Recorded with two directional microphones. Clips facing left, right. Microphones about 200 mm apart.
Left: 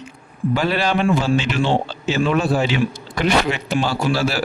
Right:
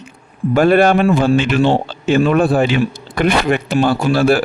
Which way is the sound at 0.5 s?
50° right (ahead or behind).